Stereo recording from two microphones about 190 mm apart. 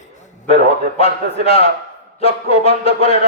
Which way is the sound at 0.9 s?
30° left (ahead or behind).